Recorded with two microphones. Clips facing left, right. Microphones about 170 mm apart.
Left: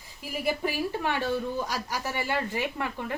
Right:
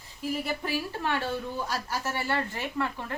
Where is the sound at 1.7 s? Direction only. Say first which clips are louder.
Even; 15° left (ahead or behind).